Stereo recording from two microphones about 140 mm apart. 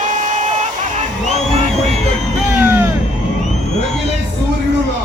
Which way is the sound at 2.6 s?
15° right (ahead or behind).